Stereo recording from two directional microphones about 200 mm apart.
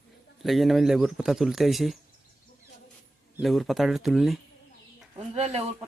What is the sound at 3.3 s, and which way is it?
Speech, centre (ahead or behind).